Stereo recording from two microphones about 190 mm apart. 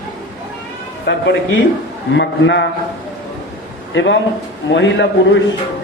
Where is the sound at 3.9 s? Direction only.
75° left (ahead or behind).